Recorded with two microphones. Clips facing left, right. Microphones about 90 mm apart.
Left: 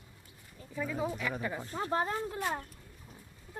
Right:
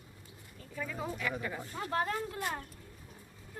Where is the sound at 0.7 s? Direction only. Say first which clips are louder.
Left 4 dB; 15° left (ahead or behind).